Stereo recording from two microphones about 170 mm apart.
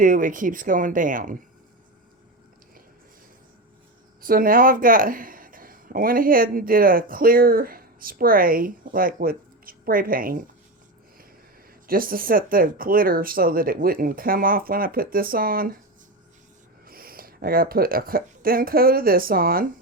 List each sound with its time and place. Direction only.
0.0 s speech: 55° right (ahead or behind)
4.2 s speech: 55° right (ahead or behind)
11.9 s speech: 55° right (ahead or behind)
16.8 s speech: 60° right (ahead or behind)